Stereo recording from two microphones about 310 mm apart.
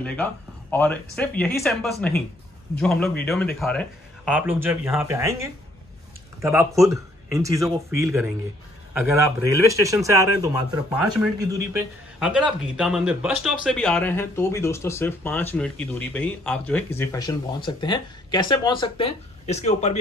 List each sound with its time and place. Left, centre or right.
0.0 s a man's voice: centre; by 20.0 s left